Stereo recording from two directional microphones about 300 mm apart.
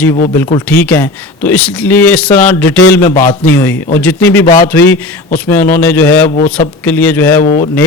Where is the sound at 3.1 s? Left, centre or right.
Left.